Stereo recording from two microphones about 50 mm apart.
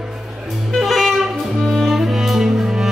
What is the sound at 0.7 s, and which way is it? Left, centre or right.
Music, centre.